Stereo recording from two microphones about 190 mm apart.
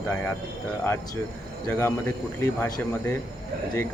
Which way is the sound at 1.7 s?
10° left (ahead or behind).